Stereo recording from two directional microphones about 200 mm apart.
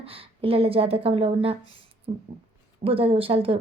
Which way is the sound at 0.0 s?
30° right (ahead or behind).